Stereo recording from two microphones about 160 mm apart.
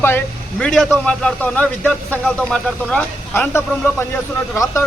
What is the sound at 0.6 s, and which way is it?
Speech, 5° left (ahead or behind).